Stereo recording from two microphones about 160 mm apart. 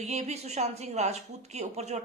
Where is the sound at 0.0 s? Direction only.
45° right (ahead or behind).